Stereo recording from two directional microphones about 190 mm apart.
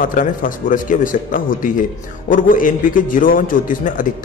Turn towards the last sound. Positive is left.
turn(degrees=45)  # may be behind; listen again after turning